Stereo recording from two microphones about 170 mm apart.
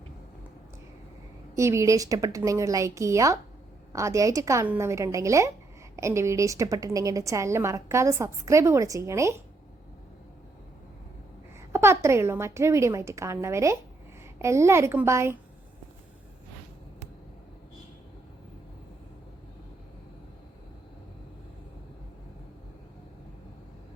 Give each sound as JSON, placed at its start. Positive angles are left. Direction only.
{"t": 1.5, "sound": "a woman's voice", "side_deg": -15}
{"t": 11.7, "sound": "a woman's voice", "side_deg": -15}